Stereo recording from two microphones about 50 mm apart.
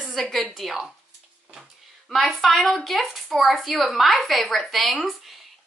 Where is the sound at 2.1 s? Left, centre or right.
Centre.